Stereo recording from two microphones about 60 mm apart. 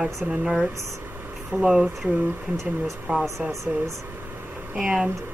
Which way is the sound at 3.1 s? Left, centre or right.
Right.